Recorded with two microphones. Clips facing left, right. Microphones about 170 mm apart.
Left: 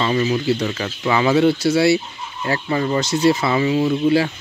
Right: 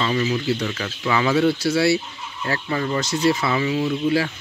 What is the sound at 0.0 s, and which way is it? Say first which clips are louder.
Speech: left 3 dB; 30° left (ahead or behind).